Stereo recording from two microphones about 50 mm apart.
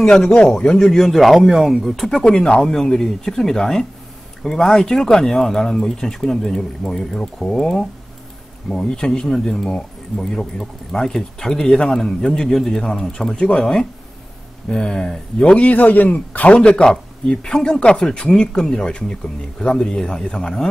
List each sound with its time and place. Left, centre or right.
0.7 s speech: centre
2.0 s speech: centre
15.7 s a man's voice: left
16.5 s speech: centre